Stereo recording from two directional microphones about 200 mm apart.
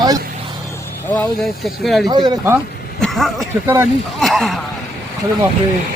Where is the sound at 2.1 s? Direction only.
20° right (ahead or behind).